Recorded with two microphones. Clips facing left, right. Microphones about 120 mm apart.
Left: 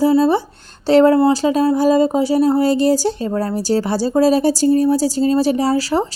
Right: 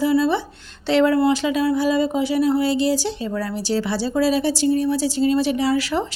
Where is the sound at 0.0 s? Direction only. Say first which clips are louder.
Left 5 dB; 40° left (ahead or behind).